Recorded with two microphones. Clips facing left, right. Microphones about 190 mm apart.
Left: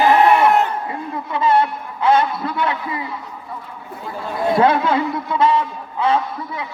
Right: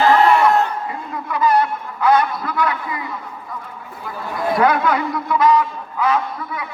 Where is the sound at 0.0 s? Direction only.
15° left (ahead or behind).